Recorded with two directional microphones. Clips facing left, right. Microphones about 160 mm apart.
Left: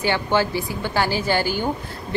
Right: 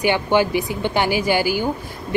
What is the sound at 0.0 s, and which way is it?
A woman's voice, 15° right (ahead or behind).